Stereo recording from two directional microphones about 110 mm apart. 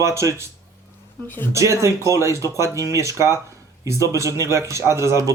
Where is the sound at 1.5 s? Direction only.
25° right (ahead or behind).